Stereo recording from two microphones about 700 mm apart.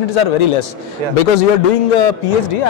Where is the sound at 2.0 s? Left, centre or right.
Left.